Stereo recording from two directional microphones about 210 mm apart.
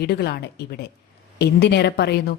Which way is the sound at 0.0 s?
50° left (ahead or behind).